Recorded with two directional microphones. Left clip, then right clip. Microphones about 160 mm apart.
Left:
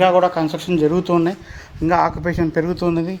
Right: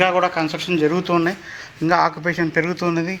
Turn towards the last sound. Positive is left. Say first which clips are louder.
# left 1 dB
turn(degrees=30)  # may be behind; listen again after turning